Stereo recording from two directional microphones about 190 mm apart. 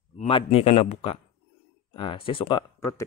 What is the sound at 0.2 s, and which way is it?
A man's voice, 30° left (ahead or behind).